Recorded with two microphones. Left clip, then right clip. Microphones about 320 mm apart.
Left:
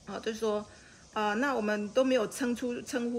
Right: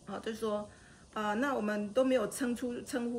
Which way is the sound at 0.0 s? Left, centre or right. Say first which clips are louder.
Left 4 dB; centre.